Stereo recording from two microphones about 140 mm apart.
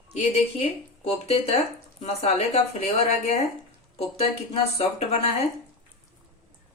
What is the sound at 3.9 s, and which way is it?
Speech, 45° left (ahead or behind).